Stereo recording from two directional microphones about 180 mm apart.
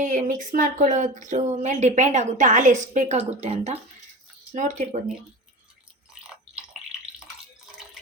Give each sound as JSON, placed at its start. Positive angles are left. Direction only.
{"t": 0.0, "sound": "speech", "side_deg": -45}